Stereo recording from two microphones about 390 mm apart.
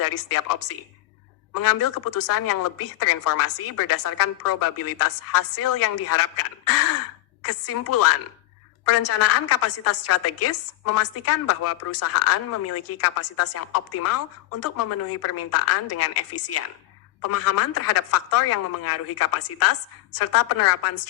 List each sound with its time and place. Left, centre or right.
0.0 s a woman's voice: left